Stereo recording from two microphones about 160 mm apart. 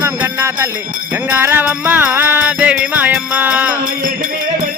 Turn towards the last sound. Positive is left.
turn(degrees=-10)  # may be behind; listen again after turning